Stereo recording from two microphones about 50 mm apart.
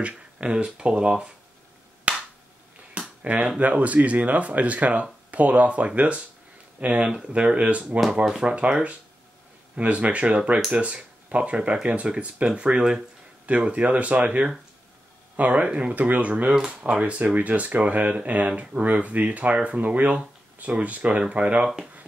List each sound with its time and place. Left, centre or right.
0.0 s speech: right
2.1 s a sound: right
3.5 s speech: right